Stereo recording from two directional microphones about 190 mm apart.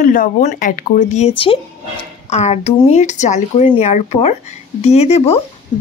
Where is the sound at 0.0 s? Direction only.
45° left (ahead or behind).